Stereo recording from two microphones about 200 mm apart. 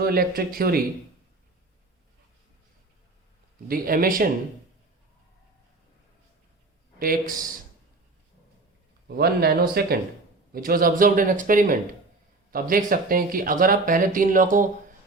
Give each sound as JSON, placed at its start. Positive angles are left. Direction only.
{"t": 0.0, "sound": "speech", "side_deg": -50}
{"t": 3.7, "sound": "speech", "side_deg": -45}
{"t": 7.0, "sound": "speech", "side_deg": -45}
{"t": 9.0, "sound": "speech", "side_deg": -50}